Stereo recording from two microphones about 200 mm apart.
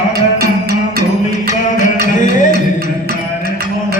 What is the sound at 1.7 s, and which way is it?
Music, 40° left (ahead or behind).